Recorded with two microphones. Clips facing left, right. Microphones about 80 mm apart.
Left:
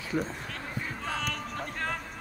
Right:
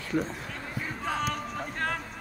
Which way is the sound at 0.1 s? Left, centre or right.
Centre.